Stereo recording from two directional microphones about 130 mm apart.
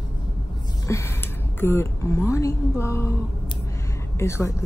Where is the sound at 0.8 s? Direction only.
25° left (ahead or behind).